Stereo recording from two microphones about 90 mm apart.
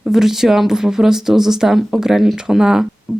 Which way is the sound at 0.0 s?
5° right (ahead or behind).